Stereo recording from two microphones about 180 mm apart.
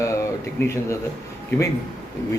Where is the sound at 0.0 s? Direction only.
15° left (ahead or behind).